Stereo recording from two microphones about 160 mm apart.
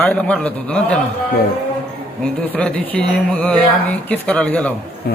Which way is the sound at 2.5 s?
5° left (ahead or behind).